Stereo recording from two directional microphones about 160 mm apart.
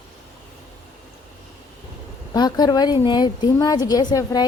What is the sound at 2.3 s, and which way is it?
A woman's voice, 25° left (ahead or behind).